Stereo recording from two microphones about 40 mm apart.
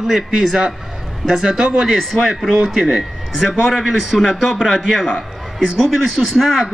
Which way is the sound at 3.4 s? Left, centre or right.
Centre.